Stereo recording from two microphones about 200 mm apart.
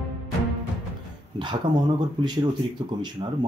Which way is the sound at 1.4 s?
20° right (ahead or behind).